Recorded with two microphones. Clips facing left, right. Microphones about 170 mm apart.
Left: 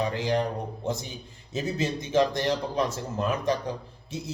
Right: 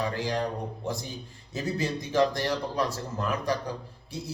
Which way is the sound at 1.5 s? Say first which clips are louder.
Left 1 dB; 20° left (ahead or behind).